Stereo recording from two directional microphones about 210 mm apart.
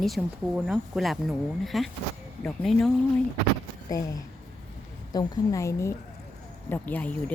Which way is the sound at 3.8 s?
15° left (ahead or behind).